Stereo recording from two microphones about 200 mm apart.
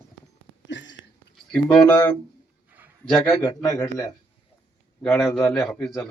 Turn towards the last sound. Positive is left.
turn(degrees=5)  # may be behind; listen again after turning